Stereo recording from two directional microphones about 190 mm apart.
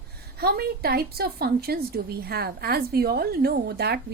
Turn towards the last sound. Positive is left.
turn(degrees=-55)  # may be behind; listen again after turning